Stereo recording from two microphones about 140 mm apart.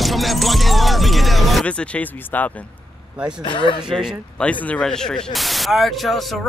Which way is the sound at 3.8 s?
5° right (ahead or behind).